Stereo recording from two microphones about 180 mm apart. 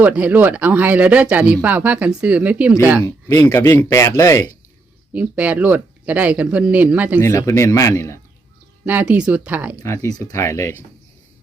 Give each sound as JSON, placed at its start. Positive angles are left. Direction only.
{"t": 0.0, "sound": "speech", "side_deg": -10}
{"t": 3.0, "sound": "speech", "side_deg": 15}
{"t": 5.1, "sound": "speech", "side_deg": -10}
{"t": 7.2, "sound": "speech", "side_deg": 15}
{"t": 8.8, "sound": "speech", "side_deg": -10}
{"t": 9.8, "sound": "speech", "side_deg": 15}